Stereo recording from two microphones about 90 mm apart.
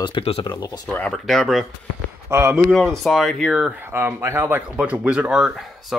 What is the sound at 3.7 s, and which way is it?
Speech, 25° right (ahead or behind).